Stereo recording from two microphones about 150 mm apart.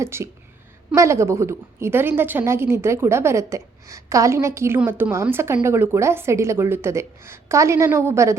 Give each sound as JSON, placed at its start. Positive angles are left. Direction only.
{"t": 0.0, "sound": "a woman's voice", "side_deg": -15}